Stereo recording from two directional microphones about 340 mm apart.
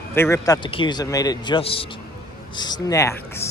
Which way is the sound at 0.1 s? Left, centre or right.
Centre.